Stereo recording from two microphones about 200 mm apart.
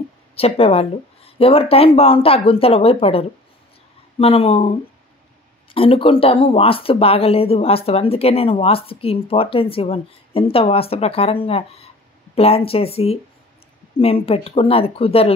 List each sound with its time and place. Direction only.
0.4 s speech: 30° left (ahead or behind)